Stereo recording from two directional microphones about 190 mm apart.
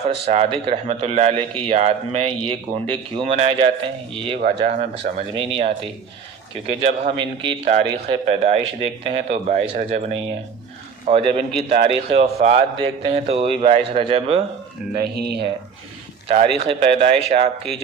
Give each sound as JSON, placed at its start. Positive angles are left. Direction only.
{"t": 0.3, "sound": "a man's voice", "side_deg": -30}
{"t": 4.4, "sound": "a man's voice", "side_deg": -45}
{"t": 7.2, "sound": "a man's voice", "side_deg": -25}
{"t": 14.9, "sound": "speech", "side_deg": -55}
{"t": 16.3, "sound": "a man's voice", "side_deg": -35}